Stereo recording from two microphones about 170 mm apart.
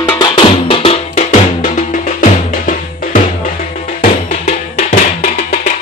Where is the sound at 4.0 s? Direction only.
55° left (ahead or behind).